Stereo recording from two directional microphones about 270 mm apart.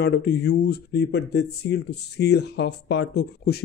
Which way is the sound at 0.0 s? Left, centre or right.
Left.